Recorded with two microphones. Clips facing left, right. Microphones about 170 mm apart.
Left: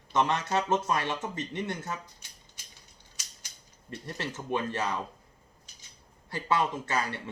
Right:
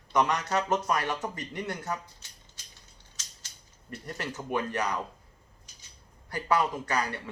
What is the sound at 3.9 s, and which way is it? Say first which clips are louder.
Speech: even; 25° left (ahead or behind).